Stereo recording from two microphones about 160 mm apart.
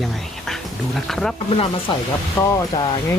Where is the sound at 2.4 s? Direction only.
20° left (ahead or behind).